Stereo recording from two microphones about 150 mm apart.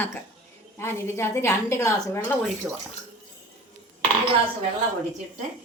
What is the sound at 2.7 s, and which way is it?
Speech, 5° right (ahead or behind).